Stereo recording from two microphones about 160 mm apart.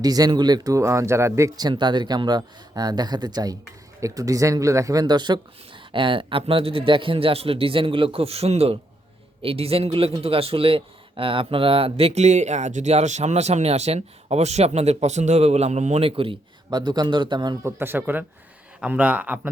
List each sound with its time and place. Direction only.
0.0 s speech: 25° right (ahead or behind)
17.7 s speech: 15° right (ahead or behind)